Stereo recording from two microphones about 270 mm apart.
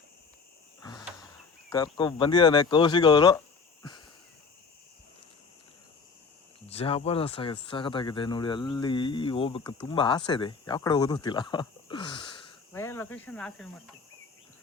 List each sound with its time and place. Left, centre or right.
0.8 s cricket: centre
1.7 s speech: centre
6.7 s speech: left; by 13.9 s centre